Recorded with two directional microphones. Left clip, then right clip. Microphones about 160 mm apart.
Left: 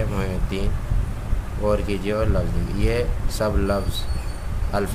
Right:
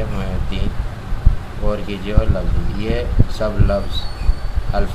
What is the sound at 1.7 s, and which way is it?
Speech, 50° left (ahead or behind).